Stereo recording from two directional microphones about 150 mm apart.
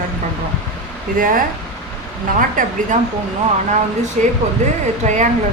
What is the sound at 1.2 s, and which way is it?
Speech, 65° right (ahead or behind).